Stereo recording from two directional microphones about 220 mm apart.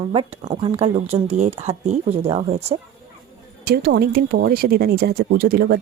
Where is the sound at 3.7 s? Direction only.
45° right (ahead or behind).